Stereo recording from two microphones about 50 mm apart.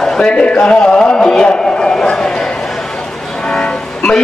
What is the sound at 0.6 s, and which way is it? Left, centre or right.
Music, centre.